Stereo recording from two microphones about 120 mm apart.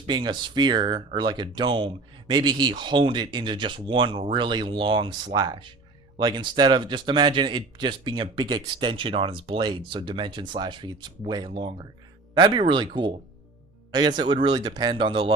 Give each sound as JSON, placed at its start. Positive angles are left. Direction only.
{"t": 0.1, "sound": "speech", "side_deg": -40}